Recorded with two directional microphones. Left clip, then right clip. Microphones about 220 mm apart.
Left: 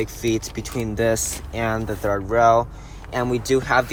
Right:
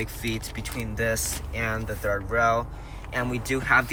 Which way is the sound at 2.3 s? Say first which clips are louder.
Left 8 dB; 30° left (ahead or behind).